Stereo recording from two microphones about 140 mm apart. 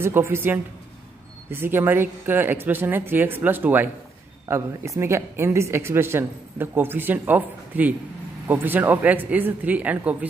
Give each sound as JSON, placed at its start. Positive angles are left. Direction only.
{"t": 0.0, "sound": "a woman's voice", "side_deg": -20}